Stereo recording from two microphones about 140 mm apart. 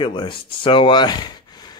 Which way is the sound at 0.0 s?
35° left (ahead or behind).